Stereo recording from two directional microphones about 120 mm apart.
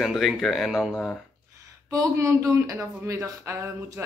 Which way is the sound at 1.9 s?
25° right (ahead or behind).